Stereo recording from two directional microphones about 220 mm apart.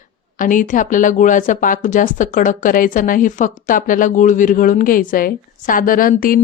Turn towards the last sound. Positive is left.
turn(degrees=40)  # may be behind; listen again after turning